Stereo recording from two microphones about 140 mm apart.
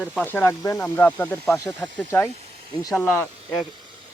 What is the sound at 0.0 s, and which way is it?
Speech, centre (ahead or behind).